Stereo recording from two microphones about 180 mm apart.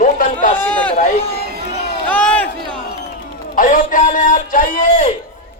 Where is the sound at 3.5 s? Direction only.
50° left (ahead or behind).